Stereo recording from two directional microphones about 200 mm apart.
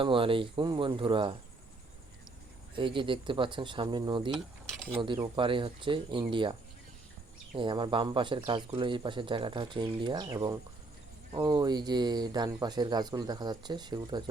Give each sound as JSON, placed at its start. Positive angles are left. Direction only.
{"t": 0.0, "sound": "speech", "side_deg": -25}
{"t": 2.7, "sound": "speech", "side_deg": -25}